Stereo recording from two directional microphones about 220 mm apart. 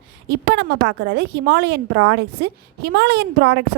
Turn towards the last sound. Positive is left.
turn(degrees=-50)  # may be behind; listen again after turning